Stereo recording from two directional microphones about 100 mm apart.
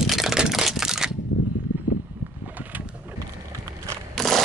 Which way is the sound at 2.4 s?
15° right (ahead or behind).